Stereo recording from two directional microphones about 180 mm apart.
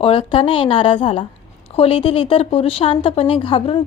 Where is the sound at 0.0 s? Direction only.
30° left (ahead or behind).